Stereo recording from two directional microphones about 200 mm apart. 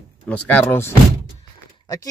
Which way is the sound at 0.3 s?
10° left (ahead or behind).